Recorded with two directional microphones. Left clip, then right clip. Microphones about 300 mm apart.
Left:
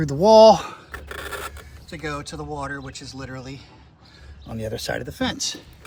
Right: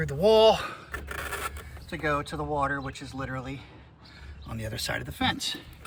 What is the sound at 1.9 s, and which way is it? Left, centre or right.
Speech, centre.